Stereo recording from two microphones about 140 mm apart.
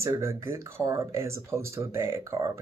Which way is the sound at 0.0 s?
20° right (ahead or behind).